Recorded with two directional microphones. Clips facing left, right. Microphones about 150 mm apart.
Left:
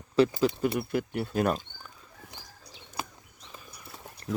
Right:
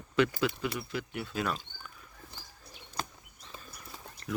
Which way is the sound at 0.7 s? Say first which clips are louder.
Left 7 dB; 50° left (ahead or behind).